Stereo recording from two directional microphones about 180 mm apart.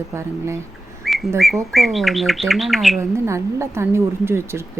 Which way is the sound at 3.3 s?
15° right (ahead or behind).